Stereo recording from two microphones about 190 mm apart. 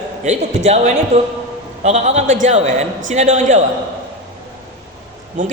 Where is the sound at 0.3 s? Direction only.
35° right (ahead or behind).